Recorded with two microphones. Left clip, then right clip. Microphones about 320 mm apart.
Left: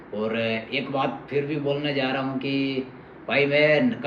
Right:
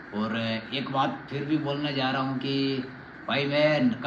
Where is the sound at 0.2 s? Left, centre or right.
Centre.